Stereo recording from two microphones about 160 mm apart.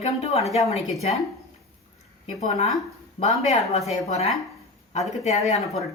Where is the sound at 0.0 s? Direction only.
40° left (ahead or behind).